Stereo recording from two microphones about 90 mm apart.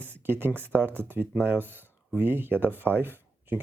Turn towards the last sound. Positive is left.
turn(degrees=-20)  # may be behind; listen again after turning